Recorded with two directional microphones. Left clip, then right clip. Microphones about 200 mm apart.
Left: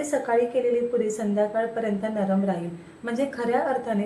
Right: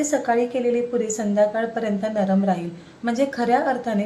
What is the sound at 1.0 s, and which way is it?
A woman's voice, 20° right (ahead or behind).